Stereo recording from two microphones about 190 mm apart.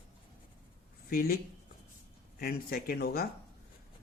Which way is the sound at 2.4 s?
55° left (ahead or behind).